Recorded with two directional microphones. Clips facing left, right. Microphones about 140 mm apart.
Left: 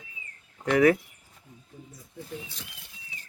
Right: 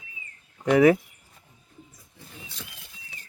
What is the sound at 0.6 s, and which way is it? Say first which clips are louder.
Speech: right 3 dB; 15° right (ahead or behind).